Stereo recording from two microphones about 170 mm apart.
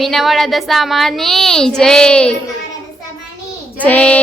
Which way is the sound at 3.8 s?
10° left (ahead or behind).